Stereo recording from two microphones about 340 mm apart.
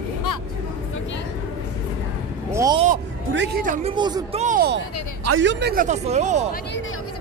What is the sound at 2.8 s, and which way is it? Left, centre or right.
Music, right.